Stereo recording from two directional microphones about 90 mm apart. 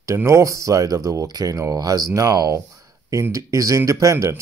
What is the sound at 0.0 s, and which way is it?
Speech, 35° right (ahead or behind).